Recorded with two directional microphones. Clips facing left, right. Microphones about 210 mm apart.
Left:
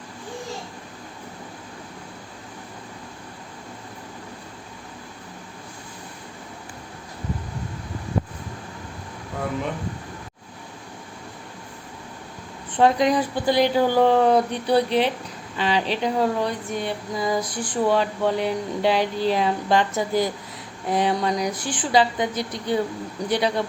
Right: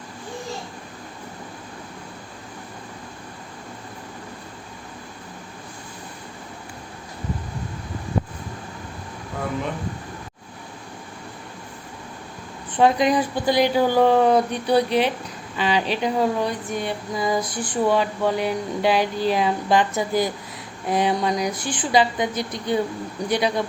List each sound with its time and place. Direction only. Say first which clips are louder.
12.7 s speech: right 1 dB; 15° right (ahead or behind)